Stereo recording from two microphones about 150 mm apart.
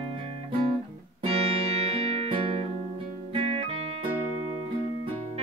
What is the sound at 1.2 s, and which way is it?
Music, 40° right (ahead or behind).